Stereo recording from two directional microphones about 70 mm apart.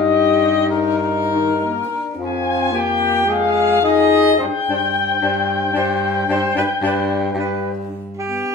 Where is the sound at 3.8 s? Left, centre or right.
Left.